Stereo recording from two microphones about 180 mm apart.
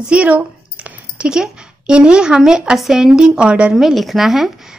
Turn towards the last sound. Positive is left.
turn(degrees=0)  # may be behind; listen again after turning